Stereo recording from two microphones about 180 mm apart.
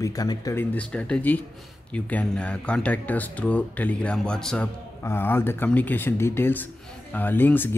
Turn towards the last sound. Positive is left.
turn(degrees=10)  # may be behind; listen again after turning